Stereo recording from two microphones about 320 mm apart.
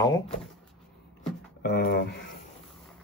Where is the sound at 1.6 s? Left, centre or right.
Left.